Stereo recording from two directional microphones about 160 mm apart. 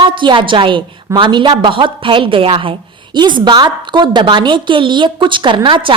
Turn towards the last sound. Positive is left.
turn(degrees=-35)  # may be behind; listen again after turning